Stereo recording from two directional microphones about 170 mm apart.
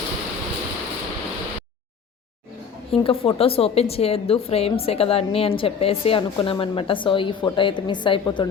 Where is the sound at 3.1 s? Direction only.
35° left (ahead or behind).